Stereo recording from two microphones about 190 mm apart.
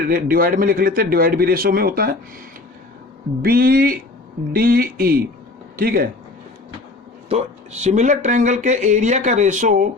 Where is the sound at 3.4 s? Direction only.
50° right (ahead or behind).